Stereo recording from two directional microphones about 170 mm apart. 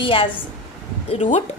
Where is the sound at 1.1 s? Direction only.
40° left (ahead or behind).